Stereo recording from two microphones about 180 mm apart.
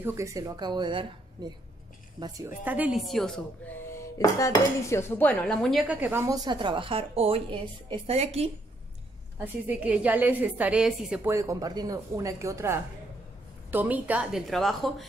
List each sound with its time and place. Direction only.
0.0 s a woman's voice: 15° right (ahead or behind)
2.6 s a woman's voice: 10° right (ahead or behind)
3.8 s dishes: 15° left (ahead or behind); by 8.5 s 35° right (ahead or behind)
9.4 s dishes: 10° right (ahead or behind)
11.2 s dishes: 15° right (ahead or behind)
13.7 s a woman's voice: 10° right (ahead or behind)